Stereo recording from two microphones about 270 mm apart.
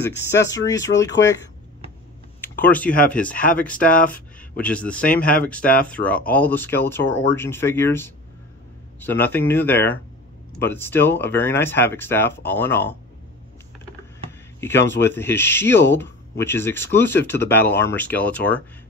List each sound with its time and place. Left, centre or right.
0.5 s speech: centre
2.4 s speech: centre
14.6 s speech: centre